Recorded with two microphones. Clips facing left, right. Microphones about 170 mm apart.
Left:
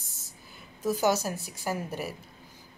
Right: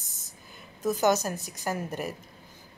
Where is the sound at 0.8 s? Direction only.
10° left (ahead or behind).